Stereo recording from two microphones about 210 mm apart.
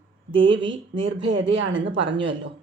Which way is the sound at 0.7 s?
65° right (ahead or behind).